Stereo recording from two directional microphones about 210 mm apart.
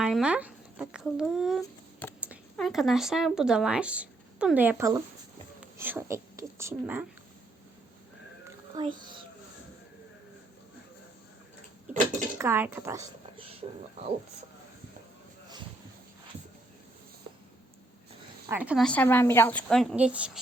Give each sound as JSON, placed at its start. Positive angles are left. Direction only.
{"t": 0.0, "sound": "a woman's voice", "side_deg": -5}
{"t": 8.4, "sound": "a sound", "side_deg": -20}
{"t": 12.4, "sound": "speech", "side_deg": -10}
{"t": 13.3, "sound": "a sound", "side_deg": -25}
{"t": 18.4, "sound": "speech", "side_deg": -10}
{"t": 18.9, "sound": "a woman's voice", "side_deg": 10}